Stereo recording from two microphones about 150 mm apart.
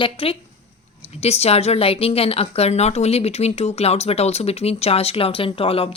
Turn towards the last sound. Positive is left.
turn(degrees=40)  # may be behind; listen again after turning